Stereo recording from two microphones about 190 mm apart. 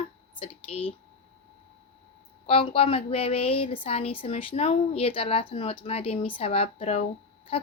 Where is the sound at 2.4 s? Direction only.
30° left (ahead or behind).